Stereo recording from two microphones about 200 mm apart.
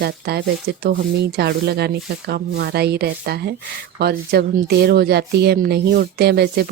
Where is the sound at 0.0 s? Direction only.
50° right (ahead or behind).